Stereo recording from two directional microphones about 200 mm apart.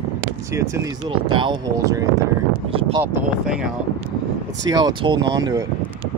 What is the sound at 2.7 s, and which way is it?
Speech, 25° right (ahead or behind).